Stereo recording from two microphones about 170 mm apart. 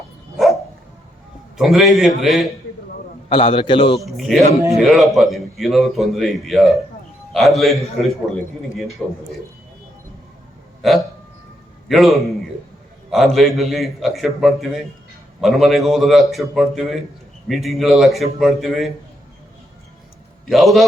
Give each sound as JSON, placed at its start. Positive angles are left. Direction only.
{"t": 1.5, "sound": "a man's voice", "side_deg": 0}
{"t": 3.2, "sound": "a man's voice", "side_deg": 30}
{"t": 4.0, "sound": "a man's voice", "side_deg": 0}
{"t": 9.0, "sound": "a man's voice", "side_deg": 0}
{"t": 11.9, "sound": "a man's voice", "side_deg": 0}
{"t": 20.5, "sound": "a man's voice", "side_deg": 0}